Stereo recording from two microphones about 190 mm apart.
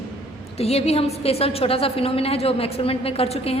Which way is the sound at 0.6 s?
35° left (ahead or behind).